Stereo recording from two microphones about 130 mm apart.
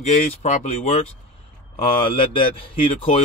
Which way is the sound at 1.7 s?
40° left (ahead or behind).